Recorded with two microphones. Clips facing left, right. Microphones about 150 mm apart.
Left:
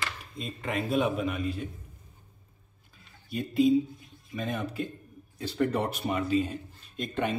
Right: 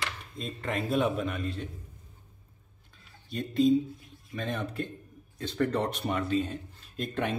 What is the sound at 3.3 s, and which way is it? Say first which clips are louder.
Speech: left 1 dB; 5° left (ahead or behind).